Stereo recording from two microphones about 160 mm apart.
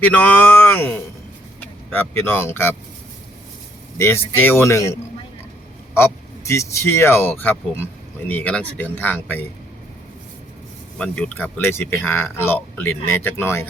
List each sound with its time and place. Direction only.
0.0 s speech: 10° left (ahead or behind)
3.9 s speech: 15° left (ahead or behind)
10.9 s speech: 10° left (ahead or behind)